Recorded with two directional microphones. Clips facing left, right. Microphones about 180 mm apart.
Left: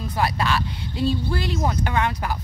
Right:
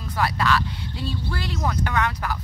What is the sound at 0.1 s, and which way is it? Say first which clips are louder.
Speech: right 1 dB; 20° left (ahead or behind).